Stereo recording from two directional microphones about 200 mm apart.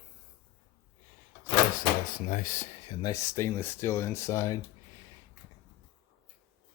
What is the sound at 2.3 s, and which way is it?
Speech, 40° left (ahead or behind).